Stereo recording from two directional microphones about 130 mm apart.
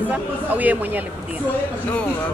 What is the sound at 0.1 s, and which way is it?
Speech, 10° right (ahead or behind).